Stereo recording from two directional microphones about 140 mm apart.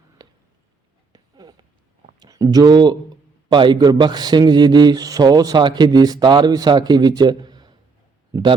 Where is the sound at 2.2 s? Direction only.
25° right (ahead or behind).